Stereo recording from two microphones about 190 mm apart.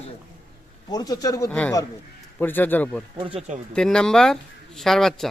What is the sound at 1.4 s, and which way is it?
Speech, 5° left (ahead or behind).